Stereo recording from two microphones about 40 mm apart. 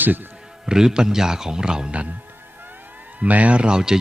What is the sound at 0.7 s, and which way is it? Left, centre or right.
A man's voice, centre.